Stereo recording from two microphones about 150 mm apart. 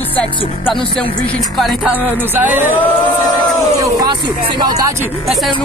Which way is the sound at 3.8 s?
25° right (ahead or behind).